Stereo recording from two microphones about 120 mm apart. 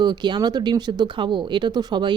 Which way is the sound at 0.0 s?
40° right (ahead or behind).